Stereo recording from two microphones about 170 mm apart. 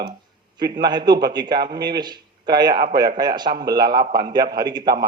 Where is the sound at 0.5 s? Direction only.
25° right (ahead or behind).